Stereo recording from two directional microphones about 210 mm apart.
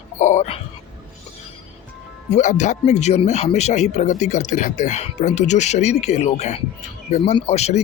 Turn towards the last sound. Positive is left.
turn(degrees=30)  # may be behind; listen again after turning